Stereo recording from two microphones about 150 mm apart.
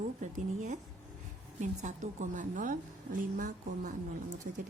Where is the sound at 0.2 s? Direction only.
55° right (ahead or behind).